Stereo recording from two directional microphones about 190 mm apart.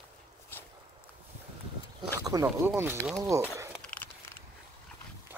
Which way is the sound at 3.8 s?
10° left (ahead or behind).